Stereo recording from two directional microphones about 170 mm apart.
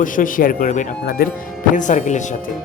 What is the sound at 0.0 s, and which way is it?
Speech, 55° left (ahead or behind).